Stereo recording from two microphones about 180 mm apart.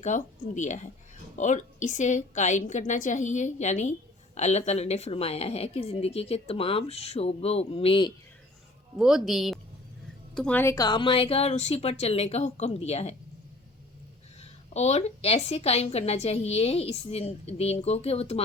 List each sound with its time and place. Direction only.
0.0 s a woman's voice: 40° left (ahead or behind)
9.0 s a woman's voice: centre (ahead or behind); by 13.1 s 35° left (ahead or behind)
14.4 s a woman's voice: 40° left (ahead or behind)